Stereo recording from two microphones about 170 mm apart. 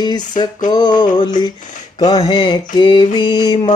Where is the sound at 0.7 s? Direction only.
25° left (ahead or behind).